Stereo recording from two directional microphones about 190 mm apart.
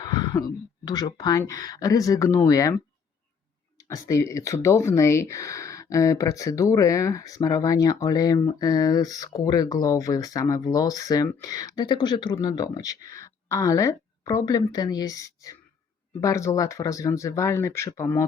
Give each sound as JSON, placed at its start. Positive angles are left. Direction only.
{"t": 0.0, "sound": "a woman's voice", "side_deg": 20}